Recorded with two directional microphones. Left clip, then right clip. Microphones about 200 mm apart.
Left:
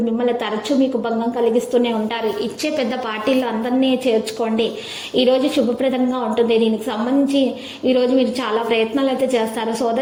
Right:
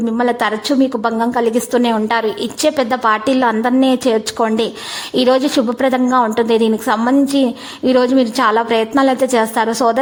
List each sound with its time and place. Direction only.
0.3 s a woman's voice: 40° right (ahead or behind)